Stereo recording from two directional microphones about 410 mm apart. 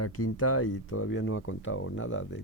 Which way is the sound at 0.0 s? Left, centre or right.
Left.